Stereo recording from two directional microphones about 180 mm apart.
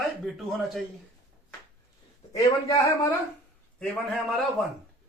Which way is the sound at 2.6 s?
15° left (ahead or behind).